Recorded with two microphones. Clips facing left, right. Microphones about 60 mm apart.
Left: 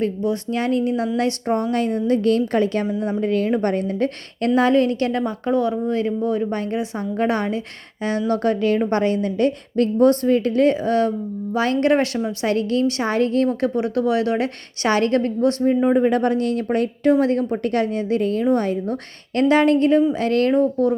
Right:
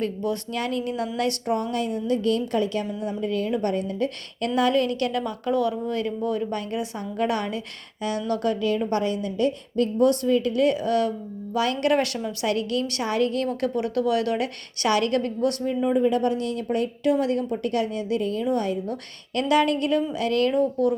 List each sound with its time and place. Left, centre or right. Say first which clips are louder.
0.0 s a woman's voice: left 5 dB; left
18.4 s a woman's voice: left 5 dB; left